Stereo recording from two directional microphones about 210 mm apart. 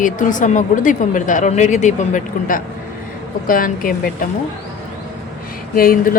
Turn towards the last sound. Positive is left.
turn(degrees=45)  # may be behind; listen again after turning